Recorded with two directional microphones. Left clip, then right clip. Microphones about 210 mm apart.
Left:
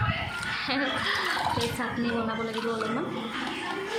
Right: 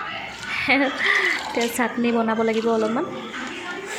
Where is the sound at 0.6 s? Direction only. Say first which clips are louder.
Right 10 dB; 25° right (ahead or behind).